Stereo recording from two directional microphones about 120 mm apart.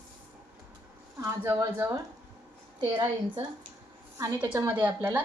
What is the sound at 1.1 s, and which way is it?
Speech, 25° right (ahead or behind).